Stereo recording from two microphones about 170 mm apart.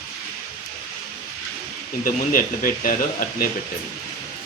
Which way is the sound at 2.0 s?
55° left (ahead or behind).